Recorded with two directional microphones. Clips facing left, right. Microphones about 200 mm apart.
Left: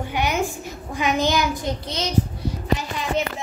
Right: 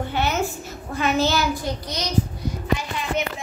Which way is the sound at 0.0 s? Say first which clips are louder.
Even; 15° left (ahead or behind).